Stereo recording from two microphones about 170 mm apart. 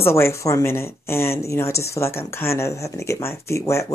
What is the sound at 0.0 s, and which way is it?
Speech, 15° left (ahead or behind).